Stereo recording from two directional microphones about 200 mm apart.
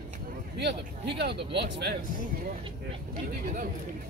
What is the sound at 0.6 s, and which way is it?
Speech, 55° right (ahead or behind).